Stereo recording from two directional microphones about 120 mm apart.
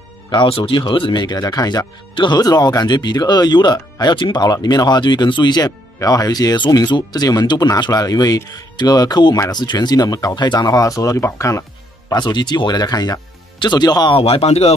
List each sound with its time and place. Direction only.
0.3 s speech: 40° left (ahead or behind); by 11.6 s 25° left (ahead or behind)
12.1 s speech: 35° left (ahead or behind)
14.1 s speech: 55° left (ahead or behind)